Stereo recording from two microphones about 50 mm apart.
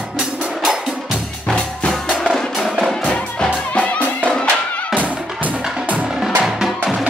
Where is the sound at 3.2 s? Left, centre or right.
Left.